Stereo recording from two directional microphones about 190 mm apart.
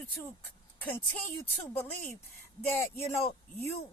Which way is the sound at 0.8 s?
10° left (ahead or behind).